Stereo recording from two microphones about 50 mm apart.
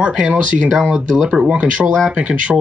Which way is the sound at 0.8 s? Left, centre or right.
Centre.